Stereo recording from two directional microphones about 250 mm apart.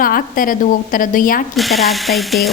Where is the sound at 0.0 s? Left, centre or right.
Left.